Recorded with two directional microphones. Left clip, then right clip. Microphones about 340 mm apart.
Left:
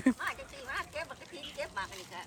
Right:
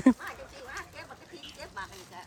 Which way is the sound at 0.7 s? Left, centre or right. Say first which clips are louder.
Left 6 dB; centre.